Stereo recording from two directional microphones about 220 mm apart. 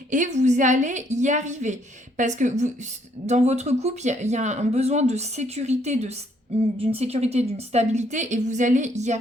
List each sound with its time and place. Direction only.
0.1 s speech: 35° right (ahead or behind)